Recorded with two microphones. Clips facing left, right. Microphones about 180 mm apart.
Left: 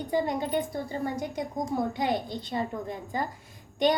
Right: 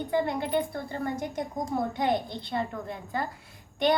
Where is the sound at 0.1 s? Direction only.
15° left (ahead or behind).